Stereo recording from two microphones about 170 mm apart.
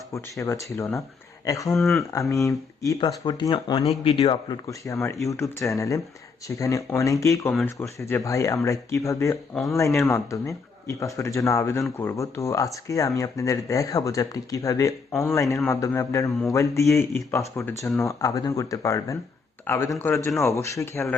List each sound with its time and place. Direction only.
0.1 s speech: 15° left (ahead or behind)
1.7 s speech: centre (ahead or behind)
2.3 s a man's voice: 20° left (ahead or behind)